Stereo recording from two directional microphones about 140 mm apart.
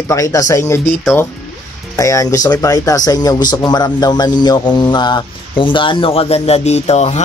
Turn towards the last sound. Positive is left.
turn(degrees=50)  # may be behind; listen again after turning